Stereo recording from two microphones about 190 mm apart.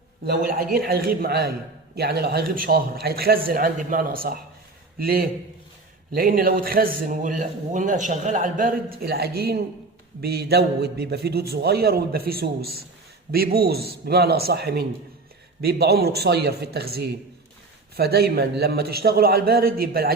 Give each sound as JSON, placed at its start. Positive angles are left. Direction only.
{"t": 0.3, "sound": "a man's voice", "side_deg": -50}